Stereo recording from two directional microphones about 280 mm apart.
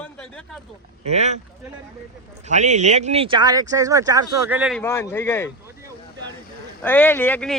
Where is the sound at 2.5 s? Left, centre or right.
Right; by 5.4 s centre.